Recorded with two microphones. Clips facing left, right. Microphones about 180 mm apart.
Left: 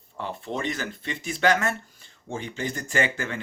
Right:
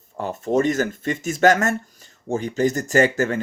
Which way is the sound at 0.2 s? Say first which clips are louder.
Right 10 dB; 45° right (ahead or behind).